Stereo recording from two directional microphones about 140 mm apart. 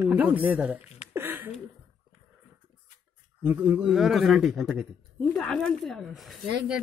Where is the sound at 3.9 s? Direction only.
Centre (ahead or behind).